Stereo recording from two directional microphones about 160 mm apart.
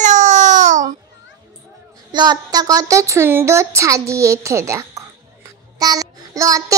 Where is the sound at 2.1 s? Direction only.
25° right (ahead or behind).